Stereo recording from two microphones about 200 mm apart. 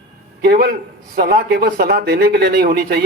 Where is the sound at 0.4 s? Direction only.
50° right (ahead or behind).